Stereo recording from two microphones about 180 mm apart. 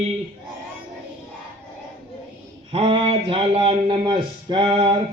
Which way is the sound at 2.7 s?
30° right (ahead or behind).